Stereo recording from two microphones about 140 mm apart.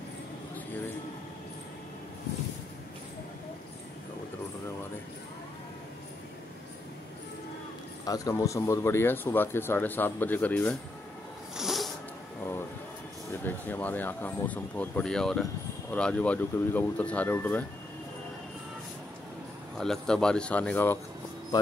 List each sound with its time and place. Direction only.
8.0 s speech: 25° left (ahead or behind)
11.5 s cat: centre (ahead or behind)
13.4 s speech: 15° left (ahead or behind)
19.8 s speech: 5° left (ahead or behind)